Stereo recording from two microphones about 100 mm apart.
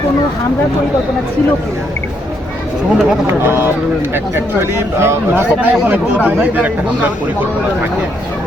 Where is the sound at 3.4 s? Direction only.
20° right (ahead or behind).